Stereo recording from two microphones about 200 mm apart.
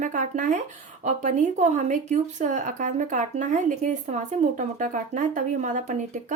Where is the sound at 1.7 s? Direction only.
40° right (ahead or behind).